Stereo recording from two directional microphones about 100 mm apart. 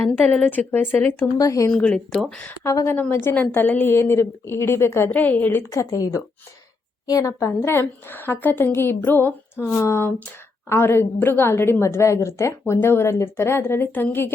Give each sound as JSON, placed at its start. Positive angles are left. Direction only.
{"t": 0.2, "sound": "a woman's voice", "side_deg": 15}
{"t": 1.4, "sound": "a woman's voice", "side_deg": 35}
{"t": 1.7, "sound": "a woman's voice", "side_deg": 10}
{"t": 2.6, "sound": "a woman's voice", "side_deg": 30}
{"t": 5.7, "sound": "a woman's voice", "side_deg": 35}